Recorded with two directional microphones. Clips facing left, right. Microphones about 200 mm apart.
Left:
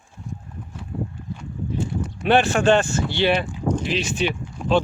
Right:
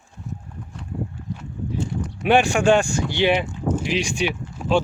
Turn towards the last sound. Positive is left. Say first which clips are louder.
# even
turn(degrees=-5)  # may be behind; listen again after turning